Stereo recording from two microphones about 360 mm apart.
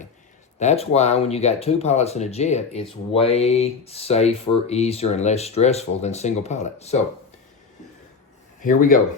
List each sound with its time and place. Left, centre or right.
0.6 s speech: centre
8.6 s speech: left